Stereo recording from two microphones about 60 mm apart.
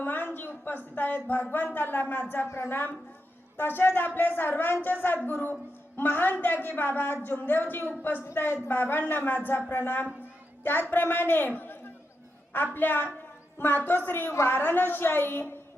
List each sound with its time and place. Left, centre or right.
0.0 s a woman's voice: left